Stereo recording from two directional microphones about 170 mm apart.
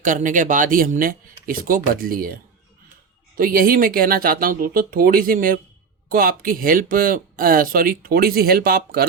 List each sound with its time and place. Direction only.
0.0 s speech: 50° right (ahead or behind); by 9.0 s 65° right (ahead or behind)